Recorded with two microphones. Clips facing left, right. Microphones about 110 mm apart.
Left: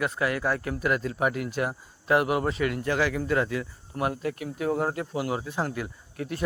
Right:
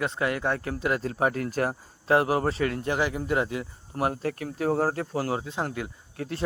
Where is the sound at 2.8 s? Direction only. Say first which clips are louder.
Left 1 dB; 20° right (ahead or behind).